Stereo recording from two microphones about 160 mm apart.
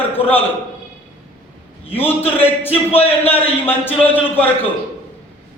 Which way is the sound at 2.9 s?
35° left (ahead or behind).